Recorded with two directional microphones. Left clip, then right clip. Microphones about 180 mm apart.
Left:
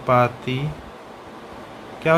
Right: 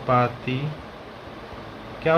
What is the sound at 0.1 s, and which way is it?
Speech, 30° left (ahead or behind).